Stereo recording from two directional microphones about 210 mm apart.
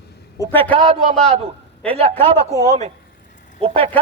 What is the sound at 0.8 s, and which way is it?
A man's voice, 30° right (ahead or behind).